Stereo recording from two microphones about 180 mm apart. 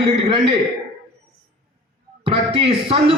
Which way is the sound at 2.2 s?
30° right (ahead or behind).